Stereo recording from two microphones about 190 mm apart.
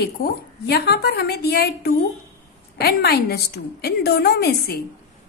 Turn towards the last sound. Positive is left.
turn(degrees=55)  # may be behind; listen again after turning